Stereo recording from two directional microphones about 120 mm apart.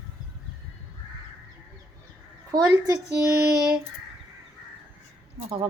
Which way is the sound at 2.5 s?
30° right (ahead or behind).